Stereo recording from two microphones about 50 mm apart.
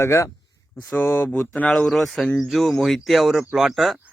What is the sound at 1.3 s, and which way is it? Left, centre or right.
Speech, left.